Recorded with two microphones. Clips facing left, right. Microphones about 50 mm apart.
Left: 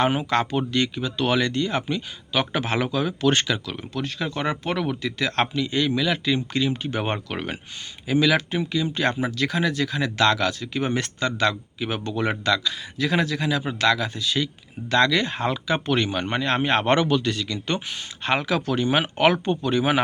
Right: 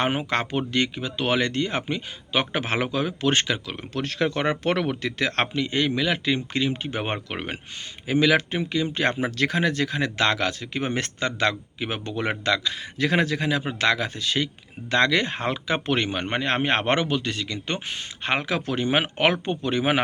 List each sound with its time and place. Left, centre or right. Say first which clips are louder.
0.0 s speech: left 3 dB; right
3.9 s a man's voice: right 3 dB; right